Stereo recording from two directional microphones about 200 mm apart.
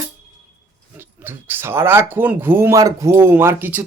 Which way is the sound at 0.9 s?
10° right (ahead or behind).